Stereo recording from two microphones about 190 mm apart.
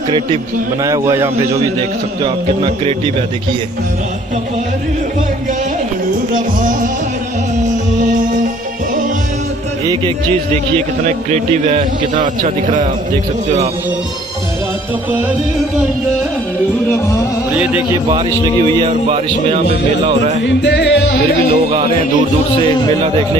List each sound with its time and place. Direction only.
0.8 s a man's voice: 15° right (ahead or behind)
6.3 s music: 45° right (ahead or behind)
11.1 s speech: 40° right (ahead or behind)
16.9 s music: 15° left (ahead or behind)
18.9 s speech: 35° right (ahead or behind)
20.4 s music: 65° left (ahead or behind)